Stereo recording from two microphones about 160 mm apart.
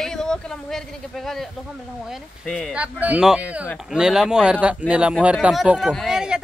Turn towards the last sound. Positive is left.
turn(degrees=-5)  # may be behind; listen again after turning